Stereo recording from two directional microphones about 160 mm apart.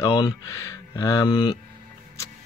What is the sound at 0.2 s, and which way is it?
Speech, 20° left (ahead or behind).